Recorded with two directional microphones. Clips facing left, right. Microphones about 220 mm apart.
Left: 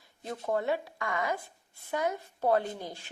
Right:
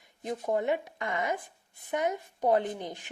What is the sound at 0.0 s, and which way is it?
Speech, 15° right (ahead or behind).